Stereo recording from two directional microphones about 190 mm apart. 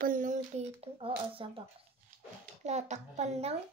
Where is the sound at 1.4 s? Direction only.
25° right (ahead or behind).